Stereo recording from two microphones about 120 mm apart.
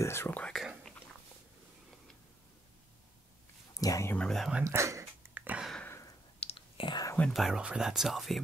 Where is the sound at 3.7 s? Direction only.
30° left (ahead or behind).